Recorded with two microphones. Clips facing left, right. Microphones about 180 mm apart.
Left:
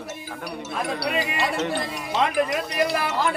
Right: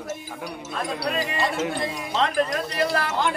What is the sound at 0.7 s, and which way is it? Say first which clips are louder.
Speech: left 1 dB; 5° left (ahead or behind).